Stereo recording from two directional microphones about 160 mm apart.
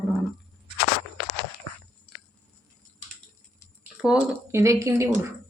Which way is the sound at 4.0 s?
5° right (ahead or behind).